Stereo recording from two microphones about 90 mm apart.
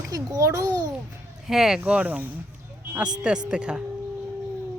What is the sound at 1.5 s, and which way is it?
Speech, 5° right (ahead or behind).